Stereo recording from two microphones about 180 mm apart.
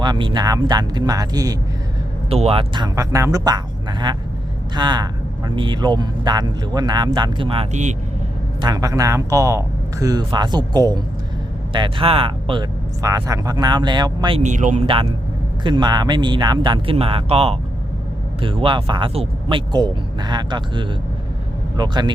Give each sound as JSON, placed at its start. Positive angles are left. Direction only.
{"t": 0.0, "sound": "speech", "side_deg": -25}
{"t": 2.3, "sound": "speech", "side_deg": -30}
{"t": 8.6, "sound": "speech", "side_deg": -20}
{"t": 13.0, "sound": "speech", "side_deg": -20}
{"t": 14.4, "sound": "speech", "side_deg": -45}
{"t": 15.6, "sound": "speech", "side_deg": -25}